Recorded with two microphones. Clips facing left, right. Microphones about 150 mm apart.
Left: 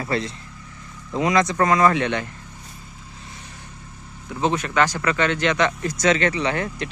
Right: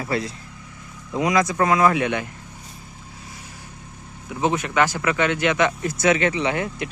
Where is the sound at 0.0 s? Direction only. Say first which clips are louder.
Even; 5° right (ahead or behind).